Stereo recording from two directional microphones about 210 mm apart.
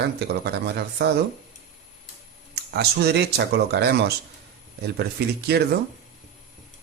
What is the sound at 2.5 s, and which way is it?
Speech, 50° right (ahead or behind).